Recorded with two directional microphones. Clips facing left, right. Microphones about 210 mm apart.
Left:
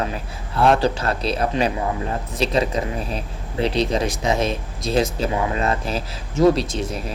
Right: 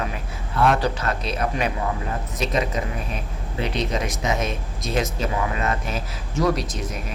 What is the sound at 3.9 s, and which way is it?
Speech, 30° left (ahead or behind).